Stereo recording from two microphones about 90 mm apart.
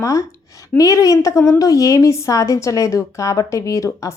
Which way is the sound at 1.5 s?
40° left (ahead or behind).